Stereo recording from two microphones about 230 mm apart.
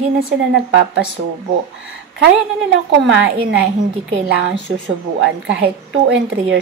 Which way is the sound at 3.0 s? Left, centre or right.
Right.